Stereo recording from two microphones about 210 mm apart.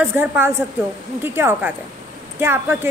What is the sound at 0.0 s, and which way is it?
A woman's voice, 10° right (ahead or behind).